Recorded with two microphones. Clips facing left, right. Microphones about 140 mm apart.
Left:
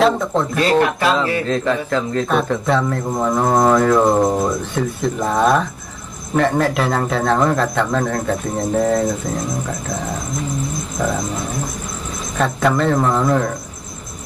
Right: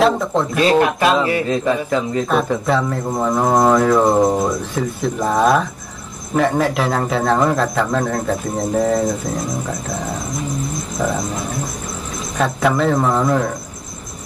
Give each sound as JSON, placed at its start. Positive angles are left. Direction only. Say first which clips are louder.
{"t": 0.0, "sound": "a man's voice", "louder": "even", "side_deg": 0}
{"t": 11.0, "sound": "speech", "louder": "even", "side_deg": -5}
{"t": 12.4, "sound": "a man's voice", "louder": "even", "side_deg": 0}